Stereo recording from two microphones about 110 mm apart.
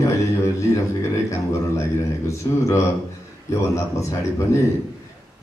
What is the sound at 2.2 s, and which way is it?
Speech, 30° left (ahead or behind).